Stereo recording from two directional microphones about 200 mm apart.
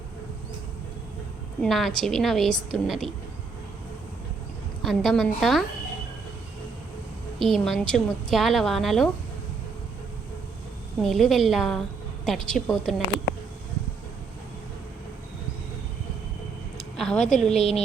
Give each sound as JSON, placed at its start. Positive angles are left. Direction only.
{"t": 1.6, "sound": "a woman's voice", "side_deg": 0}
{"t": 4.8, "sound": "a woman's voice", "side_deg": 0}
{"t": 7.3, "sound": "a woman's voice", "side_deg": 0}
{"t": 11.0, "sound": "a woman's voice", "side_deg": 0}
{"t": 16.7, "sound": "a sound", "side_deg": 0}
{"t": 17.5, "sound": "a woman's voice", "side_deg": 30}